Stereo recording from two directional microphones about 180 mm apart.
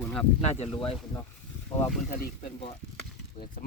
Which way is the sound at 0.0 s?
5° left (ahead or behind).